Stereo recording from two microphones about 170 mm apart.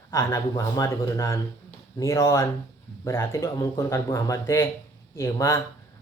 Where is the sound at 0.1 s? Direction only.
15° left (ahead or behind).